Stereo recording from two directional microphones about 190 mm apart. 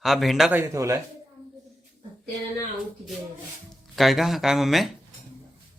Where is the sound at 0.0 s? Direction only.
Centre (ahead or behind).